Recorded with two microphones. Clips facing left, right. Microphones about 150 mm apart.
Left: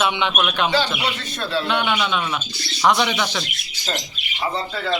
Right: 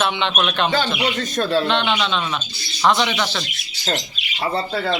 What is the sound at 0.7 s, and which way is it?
Speech, 45° right (ahead or behind).